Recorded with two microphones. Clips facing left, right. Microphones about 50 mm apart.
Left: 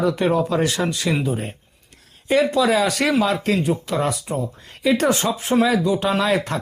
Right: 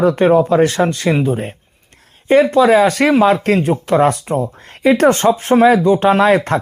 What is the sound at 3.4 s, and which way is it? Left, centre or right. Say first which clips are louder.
Speech: right 6 dB; right.